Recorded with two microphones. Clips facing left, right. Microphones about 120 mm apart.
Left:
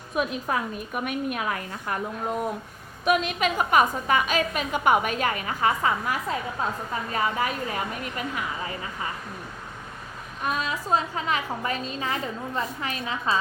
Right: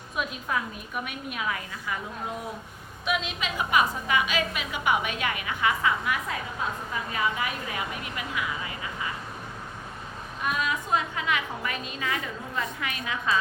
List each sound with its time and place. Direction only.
0.2 s a woman's voice: 45° left (ahead or behind)
3.0 s a woman's voice: 50° left (ahead or behind)
10.4 s a woman's voice: 35° left (ahead or behind)